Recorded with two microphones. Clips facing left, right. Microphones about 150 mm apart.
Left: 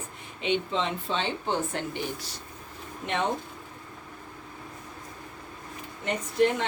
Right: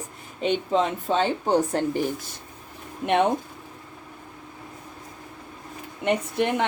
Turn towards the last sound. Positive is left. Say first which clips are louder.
# right 1 dB
turn(degrees=-65)  # may be behind; listen again after turning